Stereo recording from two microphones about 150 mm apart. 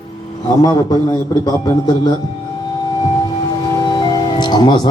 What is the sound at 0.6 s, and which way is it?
Speech, 25° left (ahead or behind).